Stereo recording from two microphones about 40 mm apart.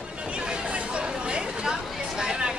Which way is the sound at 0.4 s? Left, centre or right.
Right.